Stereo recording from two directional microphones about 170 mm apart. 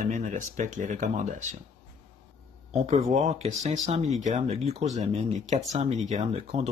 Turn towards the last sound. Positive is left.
turn(degrees=-40)  # may be behind; listen again after turning